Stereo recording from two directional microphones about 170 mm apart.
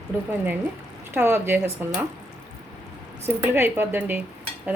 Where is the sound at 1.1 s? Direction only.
15° right (ahead or behind).